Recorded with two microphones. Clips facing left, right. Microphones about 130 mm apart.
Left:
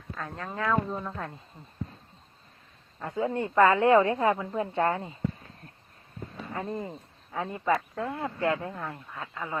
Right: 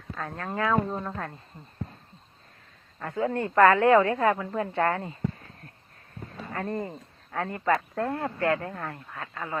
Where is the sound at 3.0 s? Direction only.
15° left (ahead or behind).